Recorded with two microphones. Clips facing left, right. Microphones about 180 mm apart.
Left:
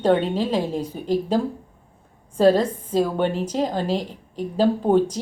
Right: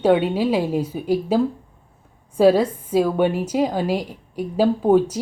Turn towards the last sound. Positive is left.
turn(degrees=-10)  # may be behind; listen again after turning